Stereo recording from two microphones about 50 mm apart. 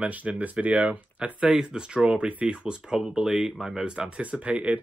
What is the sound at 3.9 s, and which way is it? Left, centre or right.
Speech, right.